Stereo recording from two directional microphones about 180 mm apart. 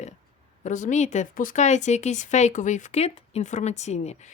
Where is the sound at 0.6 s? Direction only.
45° left (ahead or behind).